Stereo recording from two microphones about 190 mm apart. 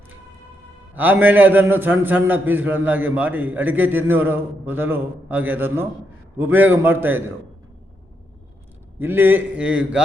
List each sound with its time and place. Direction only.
0.9 s a man's voice: 10° right (ahead or behind)
9.0 s a man's voice: 10° right (ahead or behind)